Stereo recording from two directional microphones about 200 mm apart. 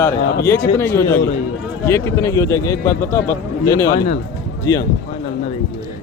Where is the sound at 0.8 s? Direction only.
15° left (ahead or behind).